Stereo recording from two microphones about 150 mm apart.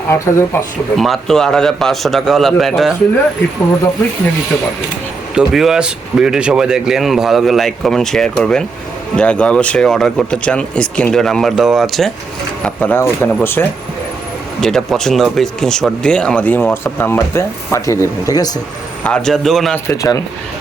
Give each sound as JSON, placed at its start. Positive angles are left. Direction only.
{"t": 0.1, "sound": "speech", "side_deg": 15}
{"t": 0.9, "sound": "speech", "side_deg": 0}
{"t": 5.3, "sound": "speech", "side_deg": -5}
{"t": 12.6, "sound": "speech", "side_deg": 10}
{"t": 14.6, "sound": "speech", "side_deg": 5}
{"t": 19.0, "sound": "speech", "side_deg": 5}
{"t": 19.7, "sound": "speech", "side_deg": 20}